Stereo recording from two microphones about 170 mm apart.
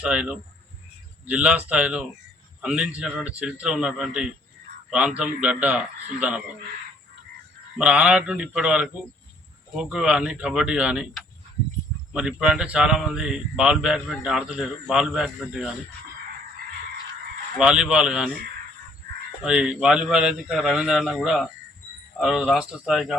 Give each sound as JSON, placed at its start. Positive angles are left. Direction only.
{"t": 0.0, "sound": "speech", "side_deg": -5}
{"t": 7.8, "sound": "speech", "side_deg": -5}
{"t": 17.6, "sound": "speech", "side_deg": -5}
{"t": 19.4, "sound": "speech", "side_deg": -5}